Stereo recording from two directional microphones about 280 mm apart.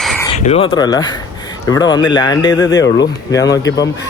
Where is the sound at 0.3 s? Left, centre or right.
Left.